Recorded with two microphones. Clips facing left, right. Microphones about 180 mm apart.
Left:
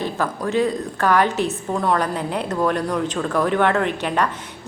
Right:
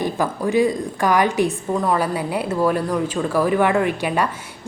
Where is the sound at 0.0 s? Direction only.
15° right (ahead or behind).